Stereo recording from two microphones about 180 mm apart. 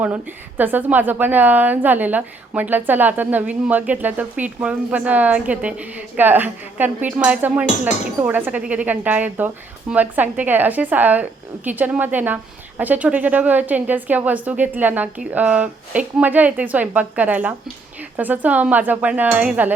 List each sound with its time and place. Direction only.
0.0 s a woman's voice: 10° right (ahead or behind)